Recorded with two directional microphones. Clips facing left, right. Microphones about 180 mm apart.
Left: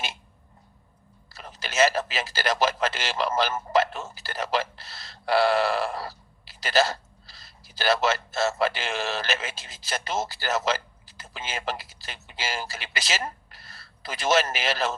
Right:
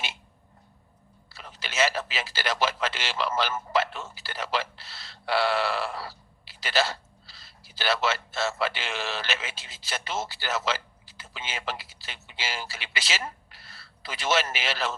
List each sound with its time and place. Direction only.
1.3 s a man's voice: 45° left (ahead or behind)